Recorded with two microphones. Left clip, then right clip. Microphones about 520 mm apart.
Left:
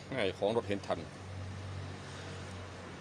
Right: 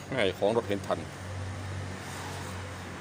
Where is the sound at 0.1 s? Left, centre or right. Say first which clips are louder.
Right 6 dB; left.